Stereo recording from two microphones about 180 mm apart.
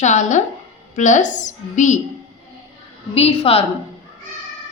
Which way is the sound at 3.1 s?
35° left (ahead or behind).